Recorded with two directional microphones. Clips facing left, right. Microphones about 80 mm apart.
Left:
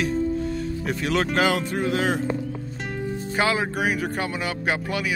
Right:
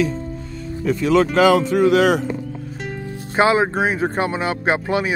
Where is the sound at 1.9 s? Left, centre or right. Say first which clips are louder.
Right 8 dB; right.